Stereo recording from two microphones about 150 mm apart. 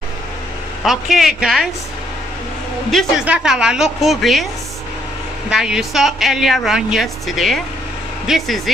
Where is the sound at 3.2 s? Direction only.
5° right (ahead or behind).